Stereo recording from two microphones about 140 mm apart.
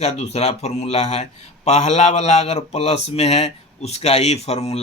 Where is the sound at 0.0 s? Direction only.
50° left (ahead or behind).